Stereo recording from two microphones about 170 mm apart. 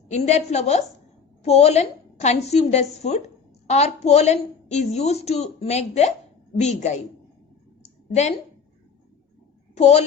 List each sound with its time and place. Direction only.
0.1 s a woman's voice: 40° left (ahead or behind)
8.1 s a woman's voice: 40° left (ahead or behind)
9.7 s a woman's voice: 40° left (ahead or behind)